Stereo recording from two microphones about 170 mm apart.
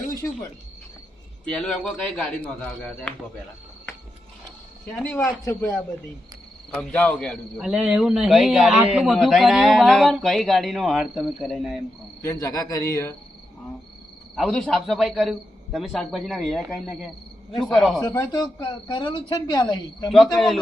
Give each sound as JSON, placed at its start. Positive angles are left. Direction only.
{"t": 1.5, "sound": "speech", "side_deg": 5}
{"t": 4.9, "sound": "a man's voice", "side_deg": 5}
{"t": 12.2, "sound": "speech", "side_deg": 20}
{"t": 14.3, "sound": "a man's voice", "side_deg": 0}
{"t": 18.0, "sound": "speech", "side_deg": 15}
{"t": 20.3, "sound": "a man's voice", "side_deg": 0}